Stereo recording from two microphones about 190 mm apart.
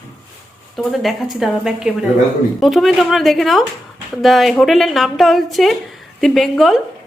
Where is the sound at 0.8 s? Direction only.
Centre (ahead or behind).